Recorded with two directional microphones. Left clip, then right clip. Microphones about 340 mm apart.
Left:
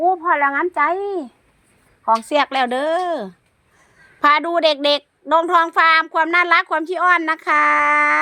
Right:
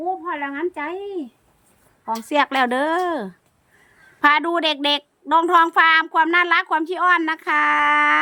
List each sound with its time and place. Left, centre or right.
0.0 s a woman's voice: centre